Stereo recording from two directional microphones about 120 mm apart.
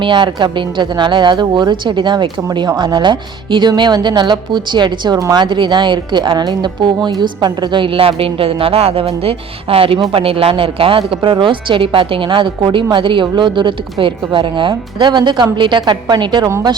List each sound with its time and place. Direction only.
0.0 s a woman's voice: 40° right (ahead or behind)